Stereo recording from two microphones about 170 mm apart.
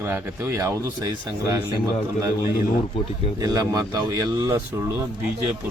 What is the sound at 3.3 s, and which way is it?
A man's voice, 20° right (ahead or behind).